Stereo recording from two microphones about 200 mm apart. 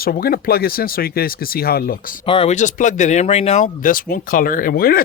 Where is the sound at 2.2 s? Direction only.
30° left (ahead or behind).